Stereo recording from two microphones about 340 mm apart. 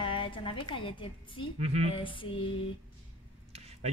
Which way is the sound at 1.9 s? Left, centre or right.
Centre.